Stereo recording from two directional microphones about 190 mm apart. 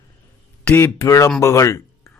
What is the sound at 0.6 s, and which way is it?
Speech, 10° left (ahead or behind).